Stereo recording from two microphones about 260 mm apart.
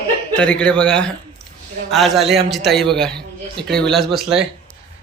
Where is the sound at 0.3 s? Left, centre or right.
Centre.